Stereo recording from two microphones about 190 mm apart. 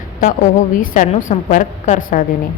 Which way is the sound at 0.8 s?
45° left (ahead or behind).